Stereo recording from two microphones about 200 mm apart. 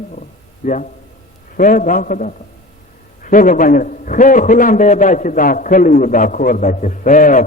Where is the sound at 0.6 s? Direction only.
40° left (ahead or behind).